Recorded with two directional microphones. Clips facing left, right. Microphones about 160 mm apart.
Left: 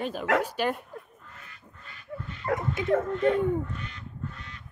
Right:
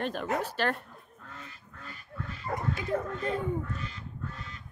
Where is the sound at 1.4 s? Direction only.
40° right (ahead or behind).